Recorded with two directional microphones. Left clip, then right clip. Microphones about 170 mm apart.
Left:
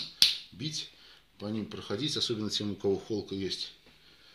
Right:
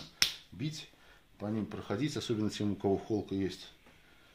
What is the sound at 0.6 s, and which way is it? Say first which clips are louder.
Speech: left 5 dB; 55° right (ahead or behind).